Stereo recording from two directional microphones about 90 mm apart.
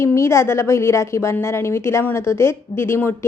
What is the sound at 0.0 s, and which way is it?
A woman's voice, 30° left (ahead or behind).